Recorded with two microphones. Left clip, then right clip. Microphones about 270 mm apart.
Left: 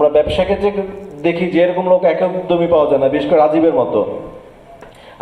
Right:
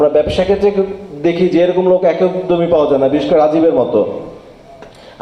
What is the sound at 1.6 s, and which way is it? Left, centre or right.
A man's voice, right.